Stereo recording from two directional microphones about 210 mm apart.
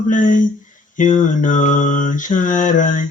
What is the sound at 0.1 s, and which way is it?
Mantra, 40° left (ahead or behind).